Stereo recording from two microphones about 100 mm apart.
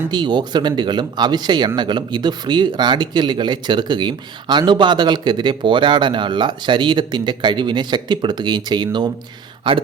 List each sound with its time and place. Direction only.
0.1 s speech: 45° right (ahead or behind)